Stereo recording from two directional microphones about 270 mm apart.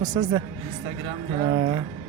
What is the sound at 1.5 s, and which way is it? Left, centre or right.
Speech, centre.